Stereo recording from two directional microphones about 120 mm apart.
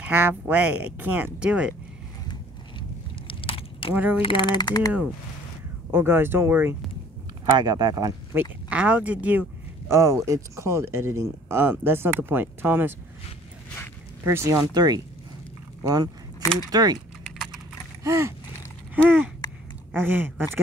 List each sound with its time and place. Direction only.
0.0 s speech: 15° right (ahead or behind)
3.3 s a sound: 50° left (ahead or behind)
3.9 s speech: 15° right (ahead or behind)
4.2 s a sound: 45° left (ahead or behind)
5.9 s speech: 20° right (ahead or behind)
7.5 s speech: 35° right (ahead or behind)
8.3 s speech: 15° right (ahead or behind)
14.2 s speech: 25° right (ahead or behind)
14.6 s speech: 35° right (ahead or behind)
18.0 s speech: 25° right (ahead or behind)
19.0 s speech: 10° right (ahead or behind)